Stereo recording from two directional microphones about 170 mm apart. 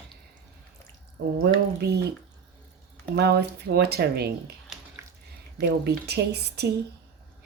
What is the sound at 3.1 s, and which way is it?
Speech, 70° right (ahead or behind).